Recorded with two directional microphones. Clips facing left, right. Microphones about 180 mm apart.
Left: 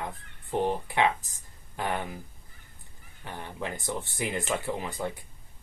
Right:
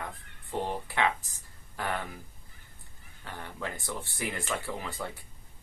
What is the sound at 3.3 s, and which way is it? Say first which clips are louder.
Speech: left 3 dB; 20° left (ahead or behind).